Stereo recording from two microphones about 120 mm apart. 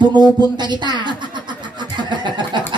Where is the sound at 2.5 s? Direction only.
40° right (ahead or behind).